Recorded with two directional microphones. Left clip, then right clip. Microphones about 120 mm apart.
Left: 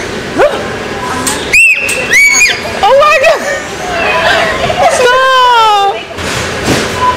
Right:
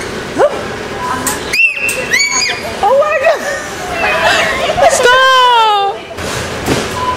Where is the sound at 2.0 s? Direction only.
Centre (ahead or behind).